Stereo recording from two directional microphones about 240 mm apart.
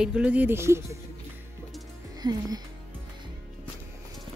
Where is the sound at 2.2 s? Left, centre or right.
Centre.